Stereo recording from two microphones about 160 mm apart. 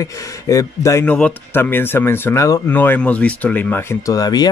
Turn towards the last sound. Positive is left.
turn(degrees=25)  # may be behind; listen again after turning